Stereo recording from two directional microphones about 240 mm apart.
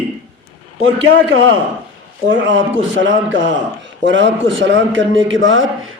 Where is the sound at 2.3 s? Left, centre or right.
Right.